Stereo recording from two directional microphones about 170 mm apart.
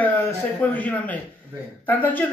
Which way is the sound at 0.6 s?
10° left (ahead or behind).